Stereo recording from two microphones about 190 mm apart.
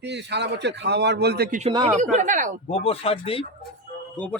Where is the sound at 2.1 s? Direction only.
40° right (ahead or behind).